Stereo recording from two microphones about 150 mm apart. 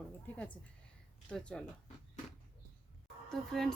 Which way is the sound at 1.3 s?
5° left (ahead or behind).